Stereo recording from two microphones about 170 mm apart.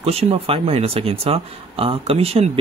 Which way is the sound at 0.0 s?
35° right (ahead or behind).